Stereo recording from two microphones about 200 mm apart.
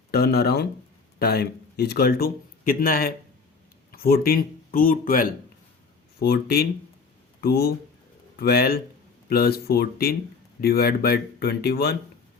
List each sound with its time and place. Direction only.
0.1 s speech: 50° left (ahead or behind)